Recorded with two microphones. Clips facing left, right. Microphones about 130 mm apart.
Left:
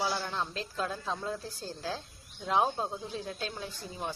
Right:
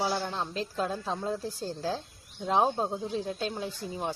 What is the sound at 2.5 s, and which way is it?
A woman's voice, 25° right (ahead or behind).